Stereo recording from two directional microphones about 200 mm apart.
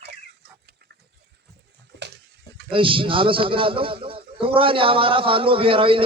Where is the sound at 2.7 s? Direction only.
25° right (ahead or behind).